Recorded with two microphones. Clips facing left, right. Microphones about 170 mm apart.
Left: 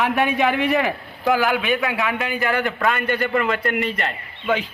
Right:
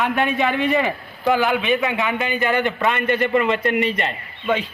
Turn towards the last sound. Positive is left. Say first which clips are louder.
# even
turn(degrees=0)  # may be behind; listen again after turning